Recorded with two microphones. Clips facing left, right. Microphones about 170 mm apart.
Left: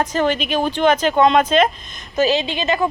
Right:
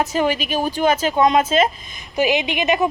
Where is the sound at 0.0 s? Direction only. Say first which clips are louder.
Left 1 dB; 10° right (ahead or behind).